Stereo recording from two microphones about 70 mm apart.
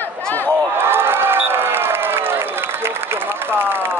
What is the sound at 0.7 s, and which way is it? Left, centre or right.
Crowd, right.